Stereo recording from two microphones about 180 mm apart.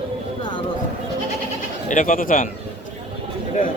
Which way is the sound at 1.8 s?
45° left (ahead or behind).